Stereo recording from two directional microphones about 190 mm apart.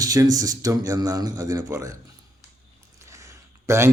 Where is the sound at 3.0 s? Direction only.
15° right (ahead or behind).